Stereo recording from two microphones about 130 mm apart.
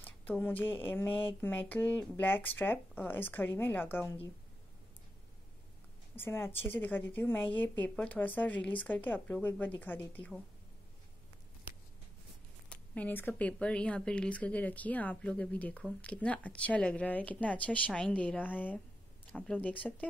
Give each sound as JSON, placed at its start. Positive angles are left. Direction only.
{"t": 0.0, "sound": "speech", "side_deg": 15}
{"t": 6.1, "sound": "speech", "side_deg": 20}
{"t": 12.6, "sound": "speech", "side_deg": 10}